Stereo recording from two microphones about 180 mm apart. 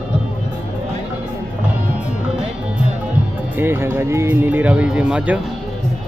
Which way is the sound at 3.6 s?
10° right (ahead or behind).